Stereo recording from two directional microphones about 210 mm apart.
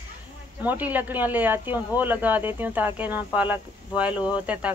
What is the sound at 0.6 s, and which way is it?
Speech, 10° right (ahead or behind).